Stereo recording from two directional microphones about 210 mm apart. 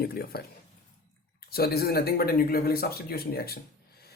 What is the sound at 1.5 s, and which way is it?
Speech, 50° left (ahead or behind).